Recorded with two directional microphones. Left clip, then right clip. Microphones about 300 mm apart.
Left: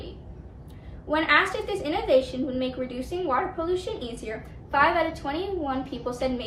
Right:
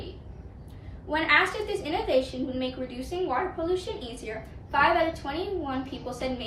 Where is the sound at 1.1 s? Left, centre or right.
Centre.